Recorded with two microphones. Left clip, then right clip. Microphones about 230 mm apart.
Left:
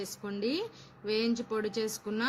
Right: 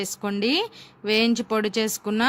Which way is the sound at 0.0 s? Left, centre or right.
Right.